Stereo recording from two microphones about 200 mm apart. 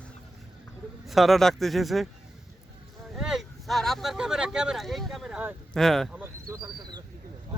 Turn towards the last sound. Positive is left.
turn(degrees=-20)  # may be behind; listen again after turning